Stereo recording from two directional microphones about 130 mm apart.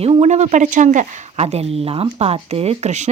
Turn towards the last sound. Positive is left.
turn(degrees=-60)  # may be behind; listen again after turning